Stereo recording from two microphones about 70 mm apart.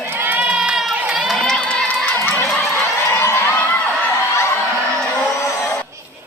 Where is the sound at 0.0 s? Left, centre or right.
Right; by 0.9 s centre.